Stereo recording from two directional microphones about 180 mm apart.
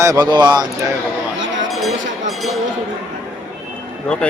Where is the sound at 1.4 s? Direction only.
90° right.